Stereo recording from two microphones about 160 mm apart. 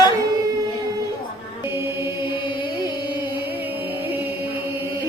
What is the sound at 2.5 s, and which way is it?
Music, 30° left (ahead or behind).